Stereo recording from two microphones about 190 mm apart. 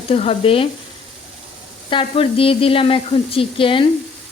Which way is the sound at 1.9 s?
25° left (ahead or behind).